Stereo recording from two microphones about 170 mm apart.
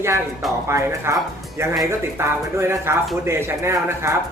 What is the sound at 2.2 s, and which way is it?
Speech, 15° right (ahead or behind).